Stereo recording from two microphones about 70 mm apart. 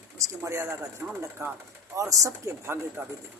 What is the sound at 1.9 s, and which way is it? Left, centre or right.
Speech, right.